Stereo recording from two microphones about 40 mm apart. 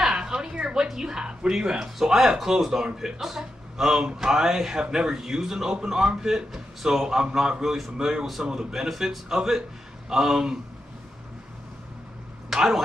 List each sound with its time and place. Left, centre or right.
0.0 s a sound: centre
0.8 s speech: centre
12.5 s speech: centre